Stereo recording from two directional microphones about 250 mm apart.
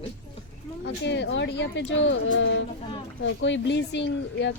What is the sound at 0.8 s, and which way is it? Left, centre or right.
Speech, left.